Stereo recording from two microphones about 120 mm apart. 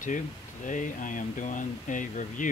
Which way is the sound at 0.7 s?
90° left.